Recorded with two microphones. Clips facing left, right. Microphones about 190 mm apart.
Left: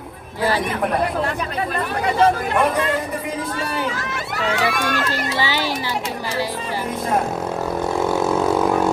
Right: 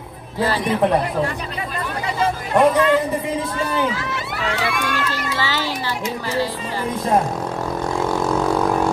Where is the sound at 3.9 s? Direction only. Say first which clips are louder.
Right 1 dB; 45° left (ahead or behind).